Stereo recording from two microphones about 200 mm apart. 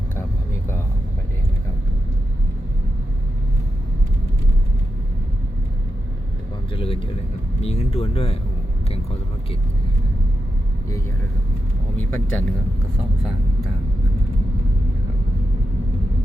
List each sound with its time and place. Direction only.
0.2 s vehicle: 10° left (ahead or behind)
6.7 s a sound: 25° left (ahead or behind)
7.6 s speech: 30° left (ahead or behind)
11.9 s speech: 5° left (ahead or behind)